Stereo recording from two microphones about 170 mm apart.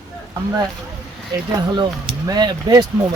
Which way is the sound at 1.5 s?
25° right (ahead or behind).